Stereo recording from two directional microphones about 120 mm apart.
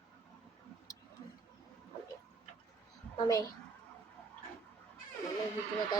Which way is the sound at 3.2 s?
30° left (ahead or behind).